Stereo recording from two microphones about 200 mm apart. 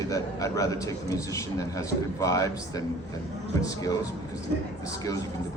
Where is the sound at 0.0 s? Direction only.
15° left (ahead or behind).